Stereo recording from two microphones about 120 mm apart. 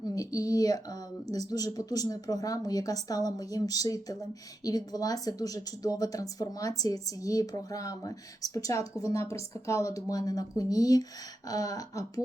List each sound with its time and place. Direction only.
0.0 s speech: 30° left (ahead or behind)